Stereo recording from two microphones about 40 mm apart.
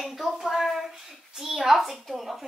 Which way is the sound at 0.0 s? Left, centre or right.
Centre.